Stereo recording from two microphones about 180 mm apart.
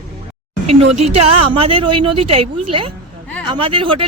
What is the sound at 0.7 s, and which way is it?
Speech, 40° right (ahead or behind).